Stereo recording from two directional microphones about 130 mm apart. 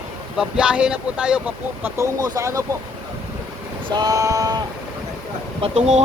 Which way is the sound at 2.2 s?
25° right (ahead or behind).